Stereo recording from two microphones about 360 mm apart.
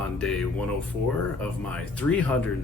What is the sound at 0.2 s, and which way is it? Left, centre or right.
Speech, centre.